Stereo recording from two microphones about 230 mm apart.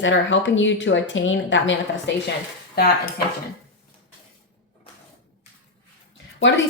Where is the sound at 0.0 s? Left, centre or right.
Left.